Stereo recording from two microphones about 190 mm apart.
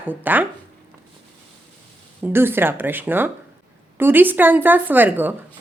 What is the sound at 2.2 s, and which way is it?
A woman's voice, 10° right (ahead or behind).